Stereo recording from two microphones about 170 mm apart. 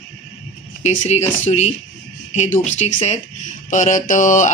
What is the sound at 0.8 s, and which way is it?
Speech, 40° left (ahead or behind).